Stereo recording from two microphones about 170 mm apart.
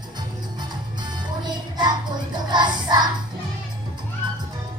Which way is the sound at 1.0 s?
25° right (ahead or behind).